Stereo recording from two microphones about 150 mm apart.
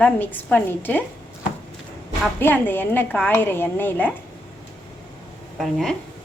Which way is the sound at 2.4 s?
15° left (ahead or behind).